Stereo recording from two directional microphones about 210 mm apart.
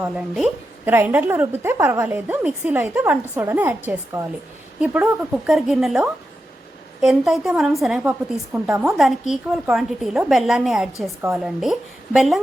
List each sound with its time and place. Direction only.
0.0 s a woman's voice: 5° right (ahead or behind)
4.8 s a woman's voice: 5° right (ahead or behind)